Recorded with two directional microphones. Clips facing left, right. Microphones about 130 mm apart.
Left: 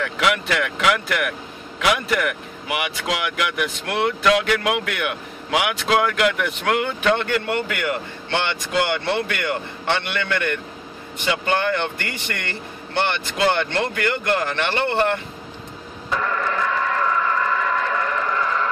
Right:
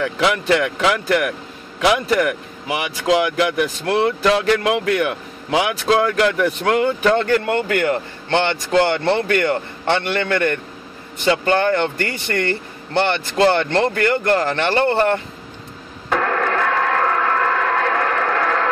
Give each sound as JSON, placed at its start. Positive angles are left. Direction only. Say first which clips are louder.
{"t": 0.0, "sound": "speech", "louder": "right 3 dB", "side_deg": -30}
{"t": 16.1, "sound": "radio", "louder": "right 5 dB", "side_deg": -65}